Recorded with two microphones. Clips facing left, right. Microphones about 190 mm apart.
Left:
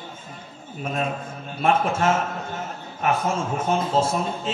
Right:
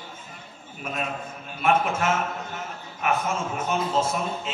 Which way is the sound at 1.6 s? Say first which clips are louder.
Left 1 dB; 30° left (ahead or behind).